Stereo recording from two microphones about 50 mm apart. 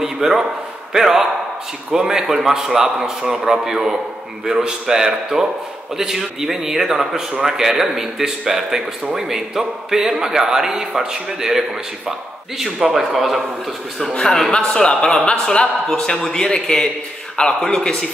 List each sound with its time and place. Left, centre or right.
0.0 s a man's voice: centre
12.8 s a man's voice: centre
14.1 s a man's voice: centre
15.9 s a man's voice: centre